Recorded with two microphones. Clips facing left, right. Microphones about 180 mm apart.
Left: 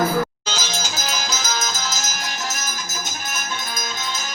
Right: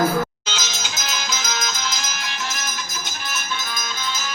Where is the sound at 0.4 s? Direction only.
40° left (ahead or behind).